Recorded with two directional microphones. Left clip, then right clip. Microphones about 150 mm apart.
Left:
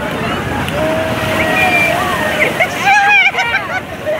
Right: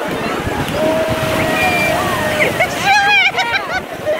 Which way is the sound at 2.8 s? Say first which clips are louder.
Left 3 dB; 20° right (ahead or behind).